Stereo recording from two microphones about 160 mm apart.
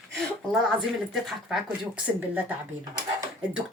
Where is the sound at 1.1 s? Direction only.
Centre (ahead or behind).